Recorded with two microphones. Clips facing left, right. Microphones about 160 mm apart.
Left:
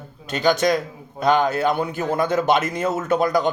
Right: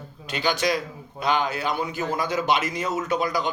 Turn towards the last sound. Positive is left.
turn(degrees=50)  # may be behind; listen again after turning